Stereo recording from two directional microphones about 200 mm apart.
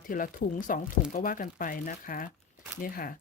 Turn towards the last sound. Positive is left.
turn(degrees=45)  # may be behind; listen again after turning